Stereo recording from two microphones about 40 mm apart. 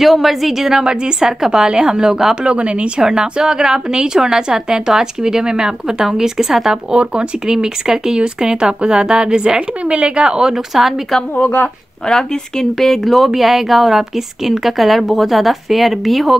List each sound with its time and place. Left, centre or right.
0.0 s a woman's voice: centre
2.4 s speech: right
3.0 s a woman's voice: centre
6.9 s speech: right
10.5 s a woman's voice: centre
11.3 s speech: left
12.1 s a woman's voice: centre